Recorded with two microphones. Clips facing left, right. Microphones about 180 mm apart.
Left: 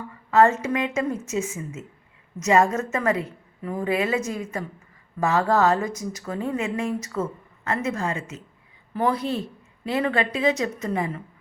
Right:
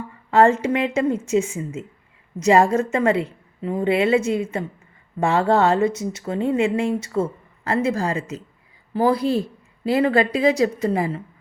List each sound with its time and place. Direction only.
0.3 s a woman's voice: 30° right (ahead or behind)